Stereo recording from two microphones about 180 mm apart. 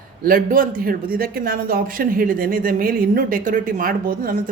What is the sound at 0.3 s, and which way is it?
A man's voice, 50° right (ahead or behind).